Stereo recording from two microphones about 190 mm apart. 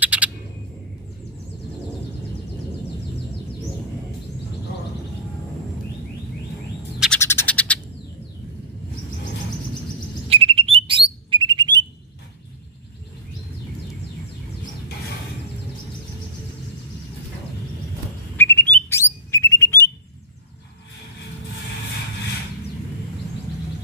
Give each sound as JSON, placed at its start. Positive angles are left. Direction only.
{"t": 0.0, "sound": "a sound", "side_deg": -10}
{"t": 7.2, "sound": "frog", "side_deg": 15}
{"t": 10.3, "sound": "bird", "side_deg": -30}
{"t": 18.3, "sound": "bird", "side_deg": 10}